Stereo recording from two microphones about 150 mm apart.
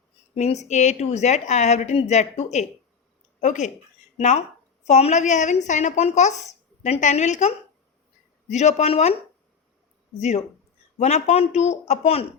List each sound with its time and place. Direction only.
0.3 s speech: 50° left (ahead or behind)
10.2 s speech: 50° left (ahead or behind)